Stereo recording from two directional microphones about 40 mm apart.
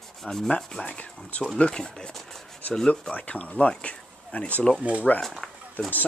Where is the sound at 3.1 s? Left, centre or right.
Left.